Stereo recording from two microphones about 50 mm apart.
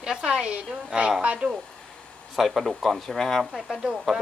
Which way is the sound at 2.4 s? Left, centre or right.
Centre.